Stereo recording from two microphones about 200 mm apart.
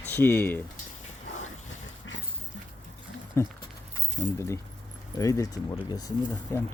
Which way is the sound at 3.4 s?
15° left (ahead or behind).